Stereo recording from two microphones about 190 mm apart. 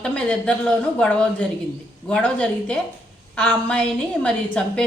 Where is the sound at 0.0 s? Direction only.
5° left (ahead or behind).